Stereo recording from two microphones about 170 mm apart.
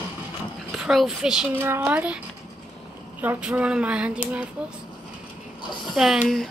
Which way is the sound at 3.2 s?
10° right (ahead or behind).